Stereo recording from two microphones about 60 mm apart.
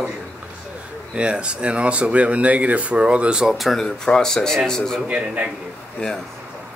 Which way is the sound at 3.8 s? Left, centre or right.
Centre.